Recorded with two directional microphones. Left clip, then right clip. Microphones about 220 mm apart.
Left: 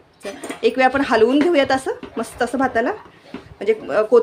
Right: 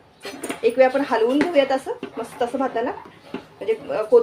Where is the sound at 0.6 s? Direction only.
40° left (ahead or behind).